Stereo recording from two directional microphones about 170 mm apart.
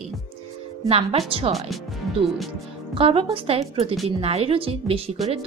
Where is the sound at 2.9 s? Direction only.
35° right (ahead or behind).